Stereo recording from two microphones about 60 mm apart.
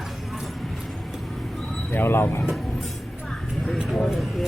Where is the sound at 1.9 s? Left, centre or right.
Left.